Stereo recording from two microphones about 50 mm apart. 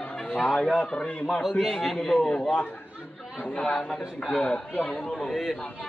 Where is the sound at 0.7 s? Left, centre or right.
Centre.